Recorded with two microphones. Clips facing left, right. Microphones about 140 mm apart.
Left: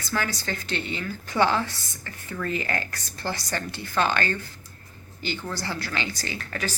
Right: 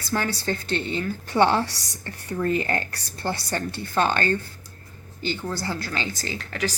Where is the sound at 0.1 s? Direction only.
30° right (ahead or behind).